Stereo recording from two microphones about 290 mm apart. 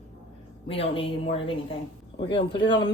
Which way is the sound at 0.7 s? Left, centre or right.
Centre.